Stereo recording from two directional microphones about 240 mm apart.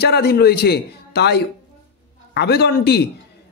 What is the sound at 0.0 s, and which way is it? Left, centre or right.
A man's voice, left.